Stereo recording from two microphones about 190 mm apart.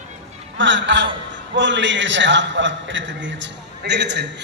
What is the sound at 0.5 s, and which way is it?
A man's voice, 75° right (ahead or behind).